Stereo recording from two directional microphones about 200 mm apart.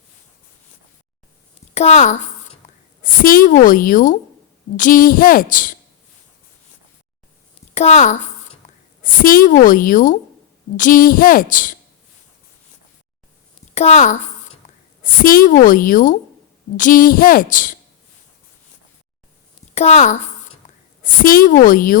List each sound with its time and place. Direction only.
1.7 s a woman's voice: 35° left (ahead or behind)
7.7 s a woman's voice: 35° left (ahead or behind)
8.6 s a sound: 35° left (ahead or behind)
9.2 s a woman's voice: 45° left (ahead or behind)
13.7 s a woman's voice: 35° left (ahead or behind)
19.7 s a woman's voice: 35° left (ahead or behind)